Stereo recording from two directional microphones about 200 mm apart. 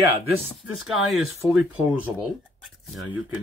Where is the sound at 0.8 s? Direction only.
Centre (ahead or behind).